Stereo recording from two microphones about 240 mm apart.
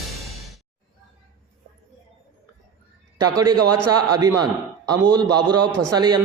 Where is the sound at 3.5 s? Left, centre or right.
Right.